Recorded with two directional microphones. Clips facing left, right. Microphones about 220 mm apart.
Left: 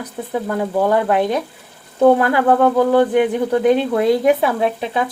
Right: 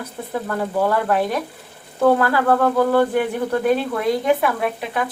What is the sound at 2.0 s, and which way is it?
Speech, 20° left (ahead or behind).